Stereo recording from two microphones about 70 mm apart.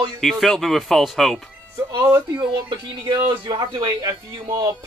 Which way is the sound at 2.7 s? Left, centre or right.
Right.